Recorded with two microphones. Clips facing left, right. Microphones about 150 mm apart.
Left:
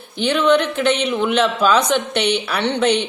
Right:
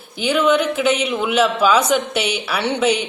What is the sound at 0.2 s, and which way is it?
Speech, 5° right (ahead or behind).